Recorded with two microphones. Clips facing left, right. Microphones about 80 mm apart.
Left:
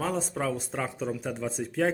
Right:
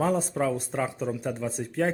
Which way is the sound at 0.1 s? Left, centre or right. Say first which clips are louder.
Right 4 dB; centre.